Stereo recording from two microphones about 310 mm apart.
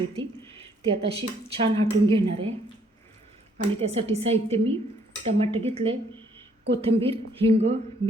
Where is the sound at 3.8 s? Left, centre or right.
Centre.